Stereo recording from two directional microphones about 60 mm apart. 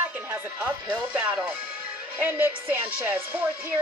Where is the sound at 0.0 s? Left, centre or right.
Right.